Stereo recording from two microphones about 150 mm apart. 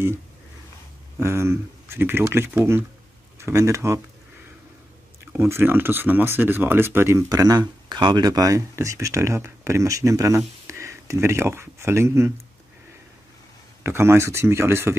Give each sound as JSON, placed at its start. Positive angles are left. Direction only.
{"t": 1.2, "sound": "speech", "side_deg": -15}
{"t": 5.3, "sound": "speech", "side_deg": -15}
{"t": 13.8, "sound": "speech", "side_deg": -15}